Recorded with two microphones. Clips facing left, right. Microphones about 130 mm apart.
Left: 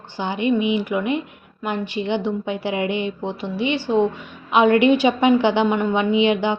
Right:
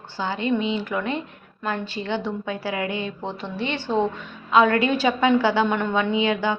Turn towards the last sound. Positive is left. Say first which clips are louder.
# left 4 dB
turn(degrees=20)  # may be behind; listen again after turning